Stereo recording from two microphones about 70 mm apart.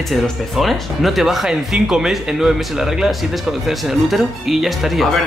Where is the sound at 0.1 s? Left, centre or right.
Centre.